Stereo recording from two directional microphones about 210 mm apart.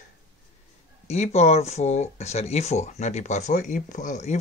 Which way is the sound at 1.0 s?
30° left (ahead or behind).